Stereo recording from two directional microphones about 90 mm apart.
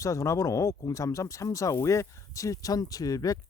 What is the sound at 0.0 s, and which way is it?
Speech, 35° left (ahead or behind).